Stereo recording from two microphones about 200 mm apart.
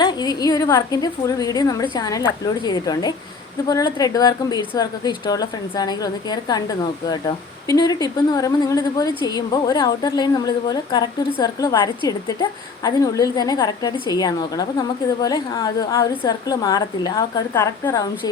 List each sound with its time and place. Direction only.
0.0 s a woman's voice: 20° left (ahead or behind)